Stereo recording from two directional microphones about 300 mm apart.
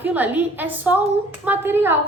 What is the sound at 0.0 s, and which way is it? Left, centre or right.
A woman's voice, centre.